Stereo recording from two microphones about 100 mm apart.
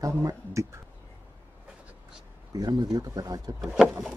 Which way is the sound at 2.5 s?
40° right (ahead or behind).